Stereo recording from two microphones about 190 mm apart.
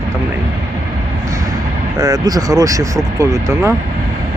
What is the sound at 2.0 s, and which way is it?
Speech, 20° right (ahead or behind).